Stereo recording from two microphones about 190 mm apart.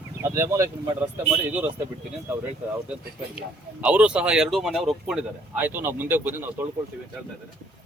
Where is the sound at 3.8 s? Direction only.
5° right (ahead or behind).